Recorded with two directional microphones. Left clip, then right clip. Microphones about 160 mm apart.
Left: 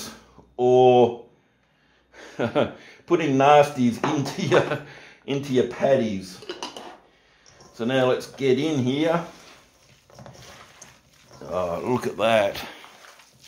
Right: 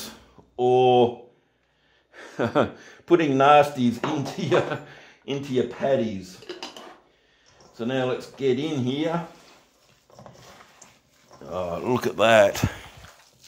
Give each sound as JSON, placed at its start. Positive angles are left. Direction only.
{"t": 0.6, "sound": "speech", "side_deg": -40}
{"t": 2.1, "sound": "speech", "side_deg": -45}
{"t": 7.7, "sound": "speech", "side_deg": -30}
{"t": 10.8, "sound": "dog", "side_deg": 5}
{"t": 11.4, "sound": "speech", "side_deg": -40}